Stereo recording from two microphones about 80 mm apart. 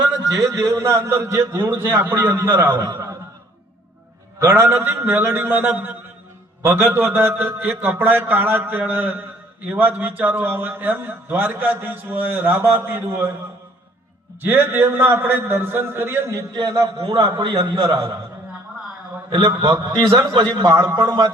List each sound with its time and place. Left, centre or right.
0.2 s a man's voice: right
2.9 s a sound: right
4.4 s a man's voice: right
14.4 s a man's voice: right
17.0 s a man's voice: right
19.6 s a man's voice: right